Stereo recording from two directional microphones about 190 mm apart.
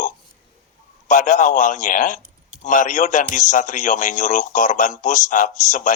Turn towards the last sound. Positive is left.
turn(degrees=40)  # may be behind; listen again after turning